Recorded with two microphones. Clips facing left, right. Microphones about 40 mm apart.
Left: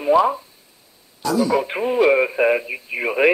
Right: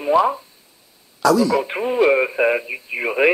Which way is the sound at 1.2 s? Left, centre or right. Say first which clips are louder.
Right 4 dB; right.